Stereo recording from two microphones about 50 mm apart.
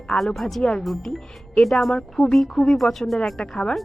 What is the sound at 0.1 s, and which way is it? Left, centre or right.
Speech, centre.